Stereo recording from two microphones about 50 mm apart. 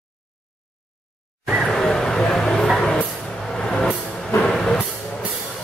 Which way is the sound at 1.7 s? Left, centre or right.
Centre.